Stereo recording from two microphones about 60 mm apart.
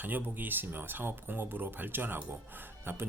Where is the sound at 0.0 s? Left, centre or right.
Right.